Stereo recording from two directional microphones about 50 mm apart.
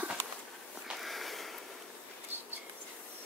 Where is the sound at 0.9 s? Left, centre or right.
Centre.